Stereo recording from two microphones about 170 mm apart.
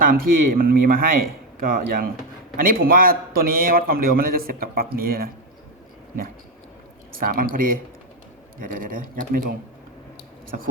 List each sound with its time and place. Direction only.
0.0 s a man's voice: 55° right (ahead or behind)
7.2 s a man's voice: 55° right (ahead or behind)